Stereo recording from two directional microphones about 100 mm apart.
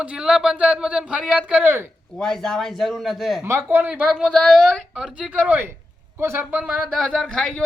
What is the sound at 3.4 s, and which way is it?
Speech, 25° right (ahead or behind).